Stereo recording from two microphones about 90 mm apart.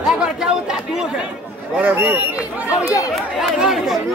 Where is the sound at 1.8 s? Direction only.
20° right (ahead or behind).